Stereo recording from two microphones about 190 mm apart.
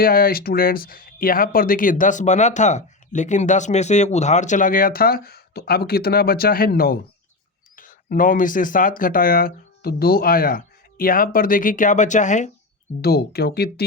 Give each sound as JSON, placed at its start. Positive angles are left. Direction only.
{"t": 0.0, "sound": "speech", "side_deg": 50}
{"t": 13.0, "sound": "speech", "side_deg": 55}